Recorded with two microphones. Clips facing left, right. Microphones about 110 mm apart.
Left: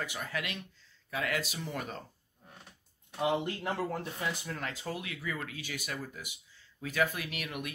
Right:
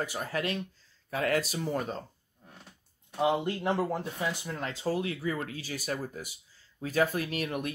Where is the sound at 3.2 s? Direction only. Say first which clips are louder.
Right 4 dB; 20° right (ahead or behind).